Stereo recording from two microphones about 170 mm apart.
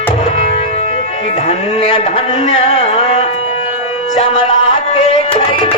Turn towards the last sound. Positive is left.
turn(degrees=30)  # may be behind; listen again after turning